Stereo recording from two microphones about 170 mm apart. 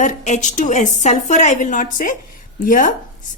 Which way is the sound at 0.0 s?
45° left (ahead or behind).